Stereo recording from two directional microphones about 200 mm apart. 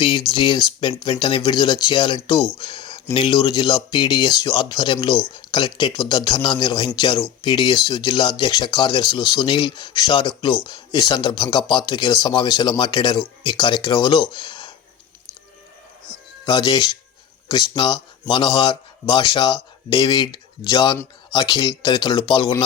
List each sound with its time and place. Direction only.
0.0 s speech: 25° left (ahead or behind)
16.5 s speech: 20° left (ahead or behind)